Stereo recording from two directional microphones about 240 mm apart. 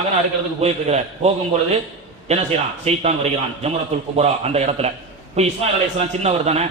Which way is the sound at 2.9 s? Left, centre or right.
Right.